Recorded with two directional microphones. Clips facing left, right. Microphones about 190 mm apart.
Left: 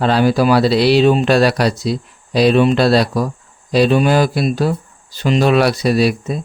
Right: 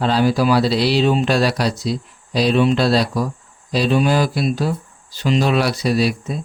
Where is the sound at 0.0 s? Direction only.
60° left (ahead or behind).